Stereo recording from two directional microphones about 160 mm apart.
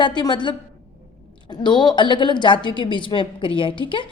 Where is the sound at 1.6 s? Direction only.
30° left (ahead or behind).